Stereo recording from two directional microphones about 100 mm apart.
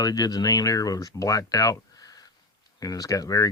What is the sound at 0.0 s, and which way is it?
Speech, 40° left (ahead or behind).